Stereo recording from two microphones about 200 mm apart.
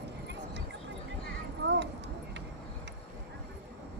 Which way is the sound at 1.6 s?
55° right (ahead or behind).